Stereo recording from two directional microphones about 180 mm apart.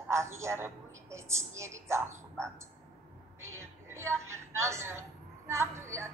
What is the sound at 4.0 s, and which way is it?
A woman's voice, 15° right (ahead or behind).